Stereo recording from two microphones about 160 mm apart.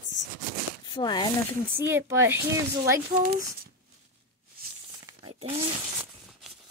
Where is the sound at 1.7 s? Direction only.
15° right (ahead or behind).